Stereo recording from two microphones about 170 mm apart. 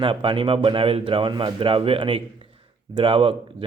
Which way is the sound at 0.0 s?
30° right (ahead or behind).